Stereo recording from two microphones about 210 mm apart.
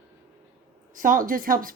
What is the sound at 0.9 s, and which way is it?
Speech, 40° right (ahead or behind).